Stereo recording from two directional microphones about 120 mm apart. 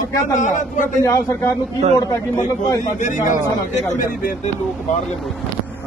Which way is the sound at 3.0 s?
90° left.